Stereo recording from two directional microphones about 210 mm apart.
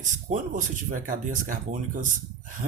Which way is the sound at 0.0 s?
35° right (ahead or behind).